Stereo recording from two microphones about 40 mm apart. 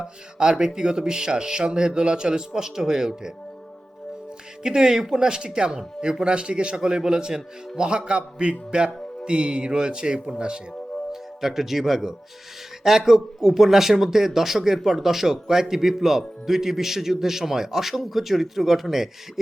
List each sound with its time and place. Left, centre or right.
0.0 s speech: centre
4.6 s speech: centre
11.1 s a man's voice: centre